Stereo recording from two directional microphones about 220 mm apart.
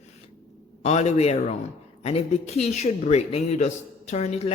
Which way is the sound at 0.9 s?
30° left (ahead or behind).